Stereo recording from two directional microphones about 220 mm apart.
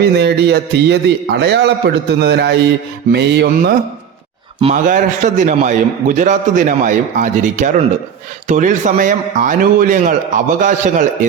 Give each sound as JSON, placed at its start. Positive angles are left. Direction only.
{"t": 0.0, "sound": "a man's voice", "side_deg": -50}
{"t": 4.6, "sound": "a man's voice", "side_deg": -35}